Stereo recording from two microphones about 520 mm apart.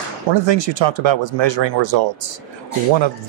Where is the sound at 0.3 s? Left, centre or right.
Right.